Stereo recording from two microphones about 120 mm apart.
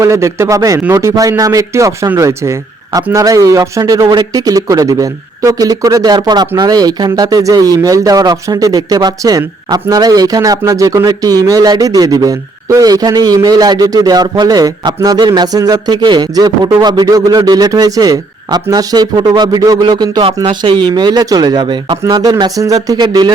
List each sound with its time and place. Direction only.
0.0 s a man's voice: 25° right (ahead or behind)
20.2 s speech: 45° right (ahead or behind)